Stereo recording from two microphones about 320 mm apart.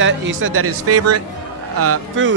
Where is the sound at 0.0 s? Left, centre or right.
Right.